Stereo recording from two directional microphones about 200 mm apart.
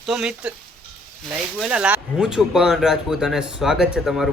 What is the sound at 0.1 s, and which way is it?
Speech, 5° right (ahead or behind).